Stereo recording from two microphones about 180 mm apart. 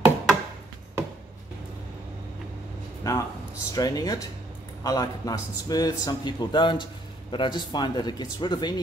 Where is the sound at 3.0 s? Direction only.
15° left (ahead or behind).